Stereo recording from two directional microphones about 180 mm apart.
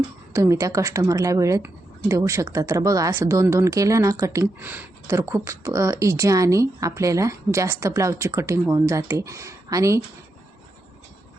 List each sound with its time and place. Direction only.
0.3 s speech: 15° right (ahead or behind)